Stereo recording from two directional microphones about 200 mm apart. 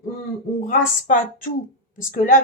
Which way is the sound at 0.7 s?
40° left (ahead or behind).